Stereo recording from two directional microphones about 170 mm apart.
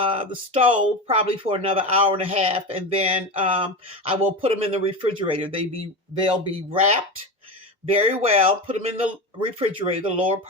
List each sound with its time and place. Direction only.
0.0 s speech: 30° right (ahead or behind)
7.9 s speech: 35° right (ahead or behind)